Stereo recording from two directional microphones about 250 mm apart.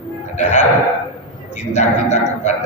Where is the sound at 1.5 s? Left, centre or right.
Left.